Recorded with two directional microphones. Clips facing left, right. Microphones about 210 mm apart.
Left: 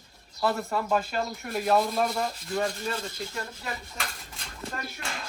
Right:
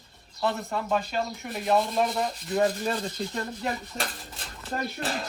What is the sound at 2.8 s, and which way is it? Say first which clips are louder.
Speech: right 4 dB; 35° right (ahead or behind).